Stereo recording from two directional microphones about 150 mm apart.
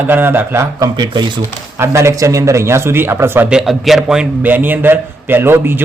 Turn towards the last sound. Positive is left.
turn(degrees=-15)  # may be behind; listen again after turning